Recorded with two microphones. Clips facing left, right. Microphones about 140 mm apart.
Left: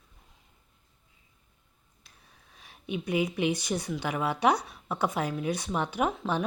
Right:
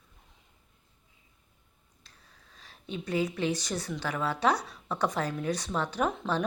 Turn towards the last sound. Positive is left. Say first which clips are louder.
# left 1 dB
turn(degrees=5)  # may be behind; listen again after turning